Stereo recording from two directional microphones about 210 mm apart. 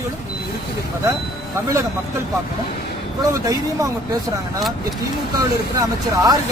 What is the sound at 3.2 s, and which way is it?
Speech, 15° right (ahead or behind).